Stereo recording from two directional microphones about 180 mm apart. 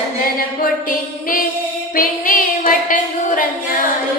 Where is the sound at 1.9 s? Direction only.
50° left (ahead or behind).